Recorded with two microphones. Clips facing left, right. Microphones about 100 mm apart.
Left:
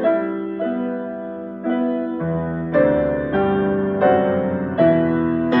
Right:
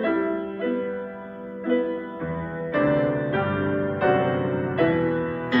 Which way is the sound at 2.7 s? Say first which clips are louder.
Left 5 dB; 25° left (ahead or behind).